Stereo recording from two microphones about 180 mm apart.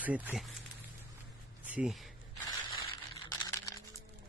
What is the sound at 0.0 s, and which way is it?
Speech, 10° right (ahead or behind).